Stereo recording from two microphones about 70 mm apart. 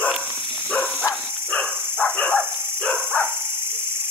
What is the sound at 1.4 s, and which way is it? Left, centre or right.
Dog, centre.